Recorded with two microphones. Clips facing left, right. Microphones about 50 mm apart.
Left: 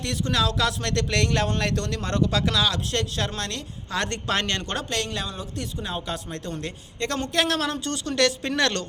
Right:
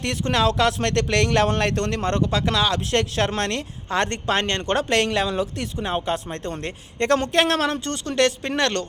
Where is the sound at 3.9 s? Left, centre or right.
Right.